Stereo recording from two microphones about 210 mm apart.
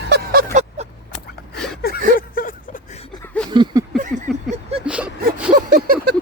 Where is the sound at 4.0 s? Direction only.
40° right (ahead or behind).